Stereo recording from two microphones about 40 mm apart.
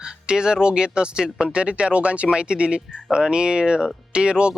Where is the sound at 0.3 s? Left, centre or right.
Centre.